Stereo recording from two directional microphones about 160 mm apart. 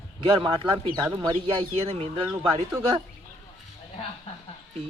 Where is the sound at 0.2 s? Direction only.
30° right (ahead or behind).